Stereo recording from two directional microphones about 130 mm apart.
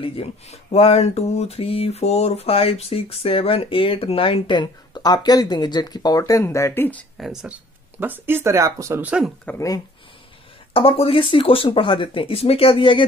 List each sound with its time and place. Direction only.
0.0 s speech: 50° left (ahead or behind); by 7.1 s 15° left (ahead or behind)
7.2 s speech: centre (ahead or behind)
8.0 s speech: 15° right (ahead or behind)
9.0 s speech: 10° right (ahead or behind)
10.7 s speech: 45° left (ahead or behind)